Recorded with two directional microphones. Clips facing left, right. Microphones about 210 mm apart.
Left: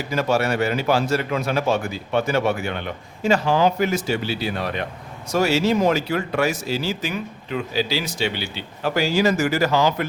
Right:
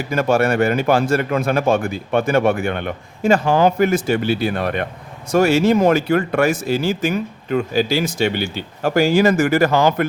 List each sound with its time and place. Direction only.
0.1 s a man's voice: 50° right (ahead or behind)